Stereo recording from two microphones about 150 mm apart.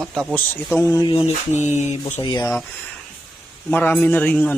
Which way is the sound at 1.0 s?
30° left (ahead or behind).